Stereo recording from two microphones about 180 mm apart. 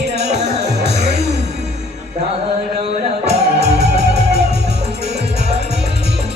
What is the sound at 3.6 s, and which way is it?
Music, 40° right (ahead or behind).